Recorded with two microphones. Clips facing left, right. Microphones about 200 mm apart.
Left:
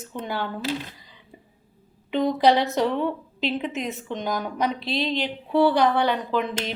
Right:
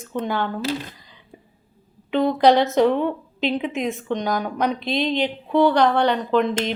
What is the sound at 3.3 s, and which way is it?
A woman's voice, 50° right (ahead or behind).